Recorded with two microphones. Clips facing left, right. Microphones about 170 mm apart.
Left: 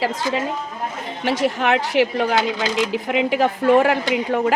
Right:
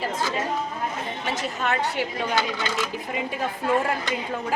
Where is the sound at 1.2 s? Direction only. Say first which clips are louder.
Left 10 dB; 70° left (ahead or behind).